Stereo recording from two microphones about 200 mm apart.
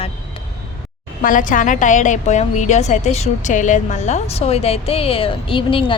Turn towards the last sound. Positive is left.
turn(degrees=25)  # may be behind; listen again after turning